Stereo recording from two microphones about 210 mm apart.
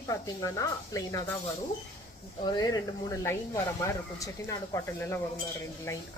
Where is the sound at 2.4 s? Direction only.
20° left (ahead or behind).